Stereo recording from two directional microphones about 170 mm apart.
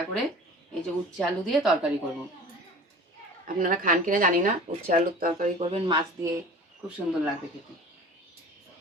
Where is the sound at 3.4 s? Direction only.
55° right (ahead or behind).